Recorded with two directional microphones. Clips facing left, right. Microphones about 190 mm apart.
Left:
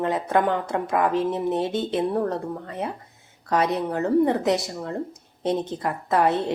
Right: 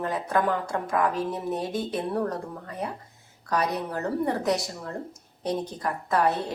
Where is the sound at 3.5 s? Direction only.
20° left (ahead or behind).